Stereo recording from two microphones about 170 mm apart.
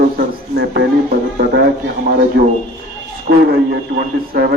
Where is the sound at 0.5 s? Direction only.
80° right.